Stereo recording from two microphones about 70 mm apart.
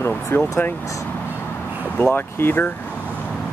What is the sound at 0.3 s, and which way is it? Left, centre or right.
Speech, left.